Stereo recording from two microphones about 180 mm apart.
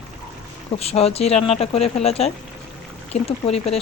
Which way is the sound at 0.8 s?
35° left (ahead or behind).